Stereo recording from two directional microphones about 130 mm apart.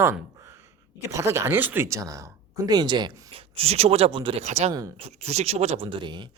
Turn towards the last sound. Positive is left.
turn(degrees=-35)  # may be behind; listen again after turning